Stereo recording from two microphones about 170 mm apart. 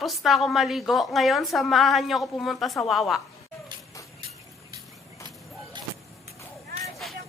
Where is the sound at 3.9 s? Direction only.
20° left (ahead or behind).